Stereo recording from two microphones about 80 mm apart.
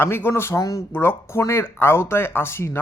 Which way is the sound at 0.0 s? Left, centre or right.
Left.